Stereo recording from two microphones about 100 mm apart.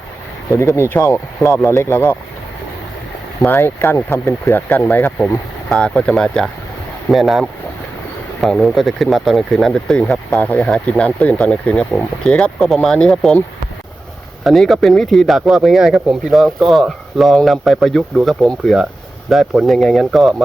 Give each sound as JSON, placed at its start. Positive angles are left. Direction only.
{"t": 0.5, "sound": "speech", "side_deg": 30}
{"t": 3.4, "sound": "speech", "side_deg": 25}
{"t": 5.6, "sound": "speech", "side_deg": 5}
{"t": 14.4, "sound": "speech", "side_deg": 0}